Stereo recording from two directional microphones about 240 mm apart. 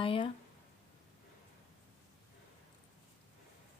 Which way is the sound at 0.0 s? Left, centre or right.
Left.